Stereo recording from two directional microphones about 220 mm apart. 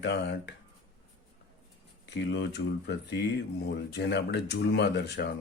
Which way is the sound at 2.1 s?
50° left (ahead or behind).